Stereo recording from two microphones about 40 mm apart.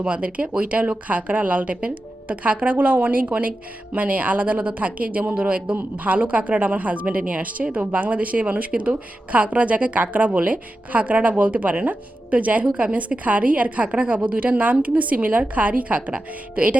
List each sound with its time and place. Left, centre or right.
0.0 s speech: right